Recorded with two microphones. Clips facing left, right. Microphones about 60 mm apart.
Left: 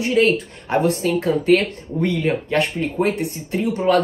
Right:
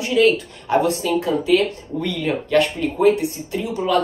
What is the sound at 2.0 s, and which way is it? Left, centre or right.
Speech, left.